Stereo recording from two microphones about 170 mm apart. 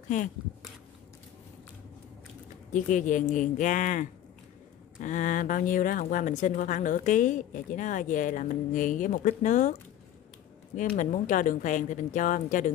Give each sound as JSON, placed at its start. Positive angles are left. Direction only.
{"t": 0.1, "sound": "a woman's voice", "side_deg": 45}
{"t": 2.7, "sound": "a woman's voice", "side_deg": 50}
{"t": 11.0, "sound": "a woman's voice", "side_deg": 50}